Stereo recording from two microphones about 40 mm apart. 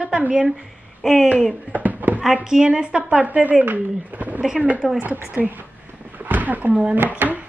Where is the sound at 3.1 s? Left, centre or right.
Right.